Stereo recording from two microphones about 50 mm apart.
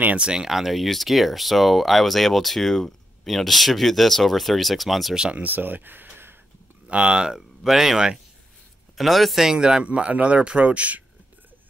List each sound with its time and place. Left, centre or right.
0.2 s speech: centre
5.1 s speech: centre
5.4 s speech: right
6.9 s speech: centre
7.3 s speech: centre; by 11.1 s right